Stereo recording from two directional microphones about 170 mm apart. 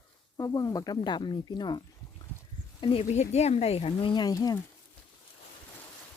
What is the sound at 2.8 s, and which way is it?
Speech, 35° left (ahead or behind).